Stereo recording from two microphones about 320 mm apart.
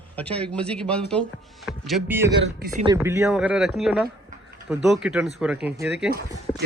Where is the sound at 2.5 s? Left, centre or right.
Right.